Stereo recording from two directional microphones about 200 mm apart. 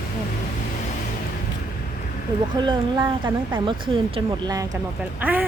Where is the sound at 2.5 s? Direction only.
20° right (ahead or behind).